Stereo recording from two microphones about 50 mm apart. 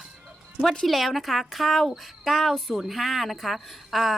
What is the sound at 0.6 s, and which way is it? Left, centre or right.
Speech, centre.